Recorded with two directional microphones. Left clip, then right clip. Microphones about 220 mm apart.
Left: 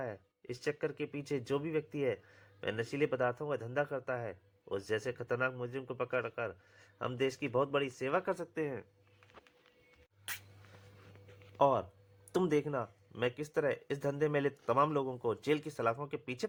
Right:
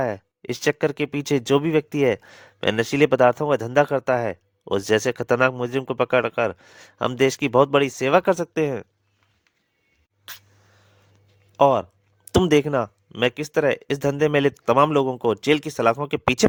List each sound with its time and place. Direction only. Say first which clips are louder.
0.0 s speech: right 17 dB; 50° right (ahead or behind)
11.5 s speech: right 12 dB; 35° right (ahead or behind)